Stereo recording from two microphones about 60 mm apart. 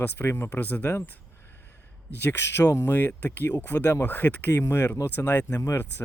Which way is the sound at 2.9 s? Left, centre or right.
Left.